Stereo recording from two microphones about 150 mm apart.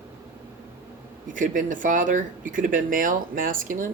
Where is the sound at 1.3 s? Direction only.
60° right (ahead or behind).